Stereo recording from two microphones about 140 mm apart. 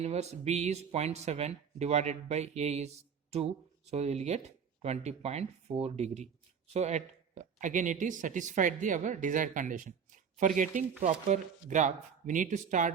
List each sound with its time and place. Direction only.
0.0 s speech: 50° right (ahead or behind)